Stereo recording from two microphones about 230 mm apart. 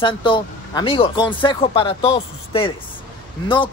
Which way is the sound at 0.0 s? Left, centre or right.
Left.